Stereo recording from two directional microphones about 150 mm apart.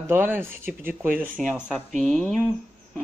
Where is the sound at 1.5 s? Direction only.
Centre (ahead or behind).